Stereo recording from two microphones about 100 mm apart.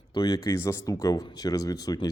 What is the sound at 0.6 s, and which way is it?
Speech, 30° left (ahead or behind).